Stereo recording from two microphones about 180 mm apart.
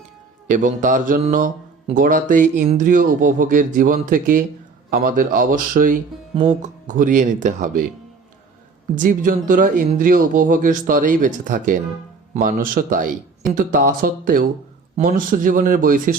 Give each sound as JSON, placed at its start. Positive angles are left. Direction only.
{"t": 0.4, "sound": "speech", "side_deg": -45}
{"t": 6.3, "sound": "speech", "side_deg": -35}
{"t": 9.0, "sound": "speech", "side_deg": -45}